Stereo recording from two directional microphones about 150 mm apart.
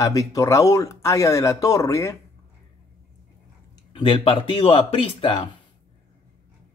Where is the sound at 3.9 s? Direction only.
35° left (ahead or behind).